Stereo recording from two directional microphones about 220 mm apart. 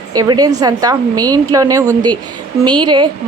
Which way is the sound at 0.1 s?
15° right (ahead or behind).